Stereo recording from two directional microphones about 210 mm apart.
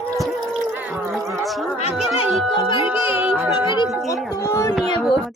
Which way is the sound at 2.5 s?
25° left (ahead or behind).